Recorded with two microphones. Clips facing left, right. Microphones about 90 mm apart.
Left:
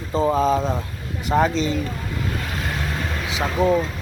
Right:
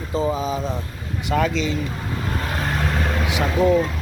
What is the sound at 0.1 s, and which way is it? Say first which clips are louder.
Speech: left 4 dB; 40° left (ahead or behind).